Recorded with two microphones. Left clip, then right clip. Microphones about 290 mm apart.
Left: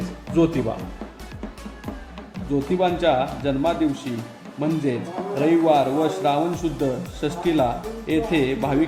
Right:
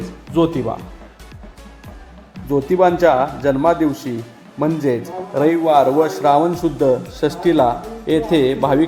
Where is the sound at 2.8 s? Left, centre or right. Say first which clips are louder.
Right 7 dB; centre.